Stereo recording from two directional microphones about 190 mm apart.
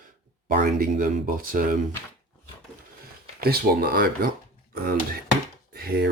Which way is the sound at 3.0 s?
50° right (ahead or behind).